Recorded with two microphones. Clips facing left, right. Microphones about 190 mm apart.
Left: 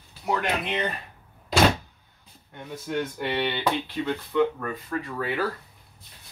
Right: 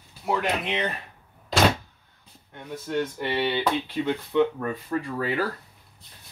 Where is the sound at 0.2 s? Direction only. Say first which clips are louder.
Right 1 dB; centre (ahead or behind).